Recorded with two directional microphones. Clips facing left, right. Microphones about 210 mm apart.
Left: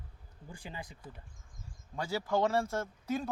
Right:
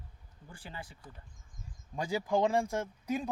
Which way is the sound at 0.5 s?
15° left (ahead or behind).